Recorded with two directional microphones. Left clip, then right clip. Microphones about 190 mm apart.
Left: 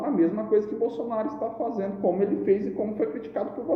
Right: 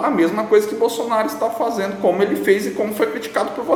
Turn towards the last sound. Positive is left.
turn(degrees=-25)  # may be behind; listen again after turning